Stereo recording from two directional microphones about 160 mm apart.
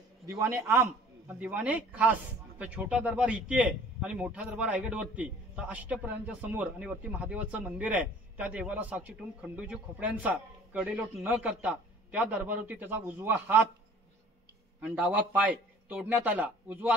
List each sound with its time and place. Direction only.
0.4 s a man's voice: 15° right (ahead or behind)
14.8 s a man's voice: 10° right (ahead or behind)